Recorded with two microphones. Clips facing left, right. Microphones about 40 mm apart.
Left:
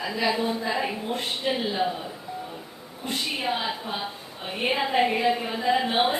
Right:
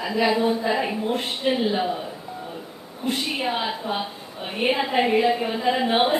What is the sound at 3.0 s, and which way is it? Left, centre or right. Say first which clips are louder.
A woman's voice: right 3 dB; centre.